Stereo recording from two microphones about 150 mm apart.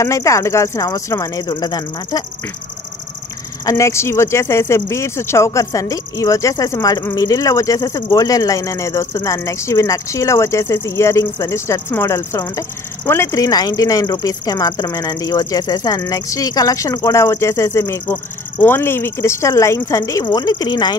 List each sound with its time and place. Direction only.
0.0 s speech: 20° left (ahead or behind)
3.6 s speech: 20° left (ahead or behind)